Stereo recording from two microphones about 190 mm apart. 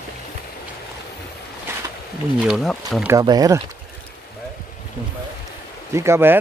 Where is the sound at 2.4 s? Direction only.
Centre (ahead or behind).